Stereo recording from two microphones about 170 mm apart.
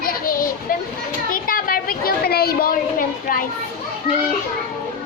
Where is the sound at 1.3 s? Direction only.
55° left (ahead or behind).